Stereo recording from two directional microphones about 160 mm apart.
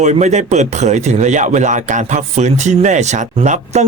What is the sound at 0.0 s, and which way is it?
Speech, 45° right (ahead or behind).